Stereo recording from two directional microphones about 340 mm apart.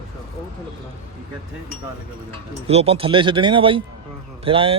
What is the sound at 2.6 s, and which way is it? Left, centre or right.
Speech, centre.